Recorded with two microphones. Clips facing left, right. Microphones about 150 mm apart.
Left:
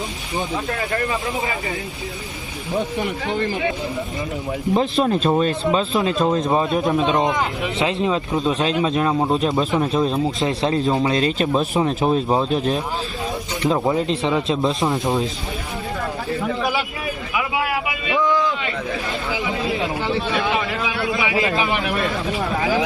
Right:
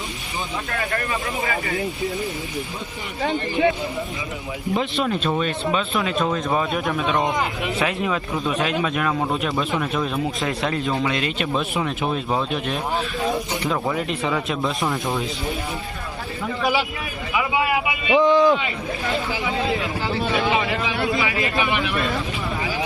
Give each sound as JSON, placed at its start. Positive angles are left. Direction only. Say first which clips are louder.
{"t": 4.7, "sound": "speech", "louder": "left 4 dB", "side_deg": 35}
{"t": 13.7, "sound": "speech", "louder": "left 7 dB", "side_deg": 25}
{"t": 17.3, "sound": "vehicle", "louder": "right 2 dB", "side_deg": 0}
{"t": 17.8, "sound": "a sound", "louder": "right 3 dB", "side_deg": -25}
{"t": 20.3, "sound": "speech", "louder": "right 1 dB", "side_deg": 0}
{"t": 21.2, "sound": "speech", "louder": "left 2 dB", "side_deg": 25}